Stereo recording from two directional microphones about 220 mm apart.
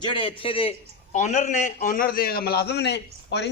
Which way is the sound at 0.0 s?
20° left (ahead or behind).